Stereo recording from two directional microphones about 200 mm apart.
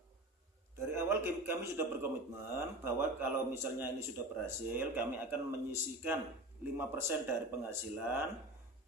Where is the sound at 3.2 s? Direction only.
10° right (ahead or behind).